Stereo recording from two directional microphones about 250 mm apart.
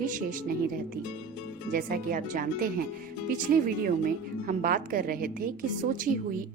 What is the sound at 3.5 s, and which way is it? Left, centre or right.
A woman's voice, right.